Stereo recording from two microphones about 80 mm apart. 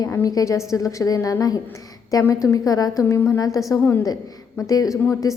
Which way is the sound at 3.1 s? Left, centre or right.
Left.